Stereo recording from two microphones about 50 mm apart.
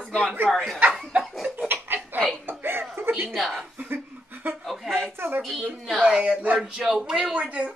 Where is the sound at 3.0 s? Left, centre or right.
Right.